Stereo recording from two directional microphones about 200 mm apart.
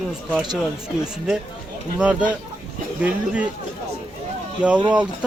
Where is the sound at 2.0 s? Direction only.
5° right (ahead or behind).